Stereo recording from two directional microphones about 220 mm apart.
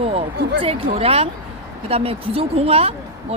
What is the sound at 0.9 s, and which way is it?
Speech, 25° right (ahead or behind).